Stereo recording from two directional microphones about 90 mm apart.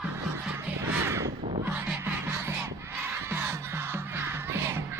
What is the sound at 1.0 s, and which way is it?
Crow, 30° right (ahead or behind).